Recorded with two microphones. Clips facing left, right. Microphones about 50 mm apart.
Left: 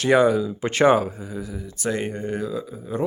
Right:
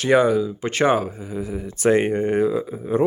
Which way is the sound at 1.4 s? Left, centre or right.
Right.